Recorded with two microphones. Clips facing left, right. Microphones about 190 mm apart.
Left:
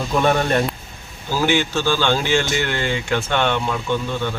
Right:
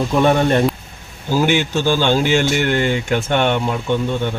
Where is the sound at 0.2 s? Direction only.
20° right (ahead or behind).